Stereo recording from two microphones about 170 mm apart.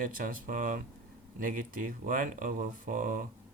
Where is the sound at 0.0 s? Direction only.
55° right (ahead or behind).